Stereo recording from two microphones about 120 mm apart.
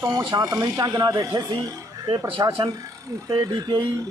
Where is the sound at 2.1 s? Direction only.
45° right (ahead or behind).